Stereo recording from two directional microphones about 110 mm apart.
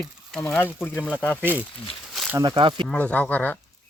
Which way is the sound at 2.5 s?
50° right (ahead or behind).